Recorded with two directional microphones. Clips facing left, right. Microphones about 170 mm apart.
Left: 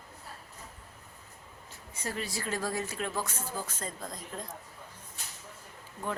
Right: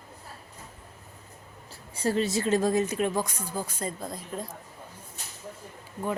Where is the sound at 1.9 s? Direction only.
30° right (ahead or behind); by 4.5 s 10° right (ahead or behind).